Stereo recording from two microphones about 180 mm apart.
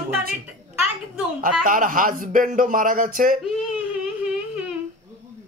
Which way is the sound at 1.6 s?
50° right (ahead or behind).